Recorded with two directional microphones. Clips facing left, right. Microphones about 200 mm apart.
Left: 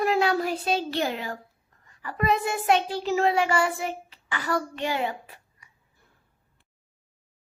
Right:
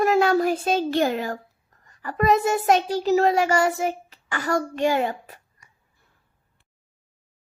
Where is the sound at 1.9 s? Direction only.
45° right (ahead or behind).